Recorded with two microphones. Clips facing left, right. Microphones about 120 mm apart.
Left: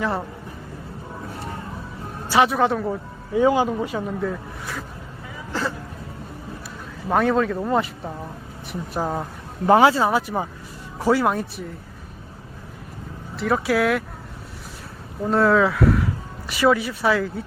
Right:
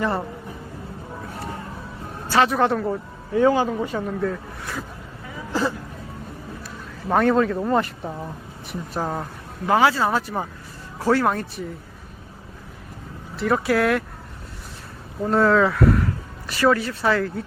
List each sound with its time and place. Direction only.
0.0 s speech: centre (ahead or behind)
2.5 s speech: centre (ahead or behind)
7.1 s speech: centre (ahead or behind)
9.6 s speech: 25° left (ahead or behind)
10.1 s speech: 10° left (ahead or behind)
13.3 s speech: centre (ahead or behind)
15.2 s speech: centre (ahead or behind)